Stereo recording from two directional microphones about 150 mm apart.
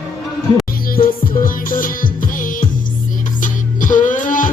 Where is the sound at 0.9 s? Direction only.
70° left (ahead or behind).